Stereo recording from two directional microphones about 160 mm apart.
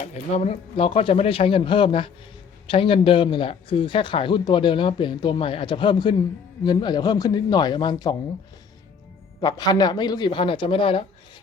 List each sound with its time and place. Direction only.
0.0 s speech: 45° left (ahead or behind); by 8.1 s 25° left (ahead or behind)
9.4 s speech: 25° left (ahead or behind)